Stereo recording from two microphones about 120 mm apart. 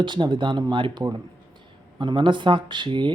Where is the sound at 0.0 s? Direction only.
40° right (ahead or behind).